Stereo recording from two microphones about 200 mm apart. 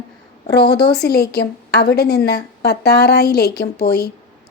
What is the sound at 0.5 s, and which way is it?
A woman's voice, 55° left (ahead or behind).